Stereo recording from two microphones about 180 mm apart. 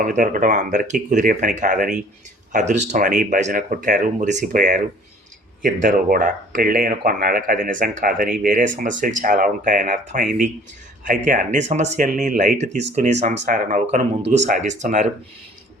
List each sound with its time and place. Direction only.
0.0 s speech: 45° right (ahead or behind)